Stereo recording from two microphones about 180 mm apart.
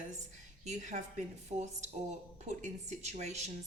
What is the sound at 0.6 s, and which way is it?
Speech, 40° right (ahead or behind).